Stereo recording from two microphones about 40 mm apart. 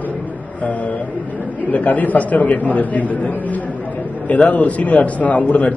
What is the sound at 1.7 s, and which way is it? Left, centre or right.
A man's voice, left.